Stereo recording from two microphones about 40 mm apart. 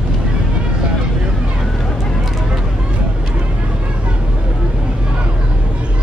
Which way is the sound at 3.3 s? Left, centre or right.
Right.